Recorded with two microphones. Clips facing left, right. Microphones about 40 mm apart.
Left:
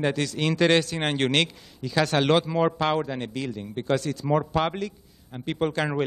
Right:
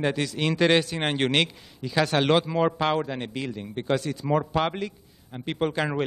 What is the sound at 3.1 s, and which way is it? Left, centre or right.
A man's voice, centre.